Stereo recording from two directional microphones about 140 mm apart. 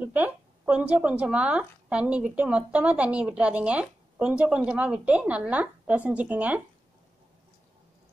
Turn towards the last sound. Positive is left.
turn(degrees=-10)  # may be behind; listen again after turning